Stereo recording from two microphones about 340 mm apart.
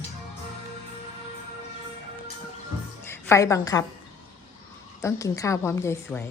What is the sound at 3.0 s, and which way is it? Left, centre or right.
Speech, centre.